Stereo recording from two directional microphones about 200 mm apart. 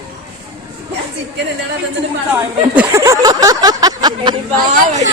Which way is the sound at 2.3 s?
10° right (ahead or behind).